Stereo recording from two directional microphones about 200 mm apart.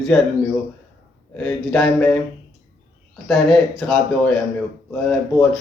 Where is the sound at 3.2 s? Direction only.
Centre (ahead or behind).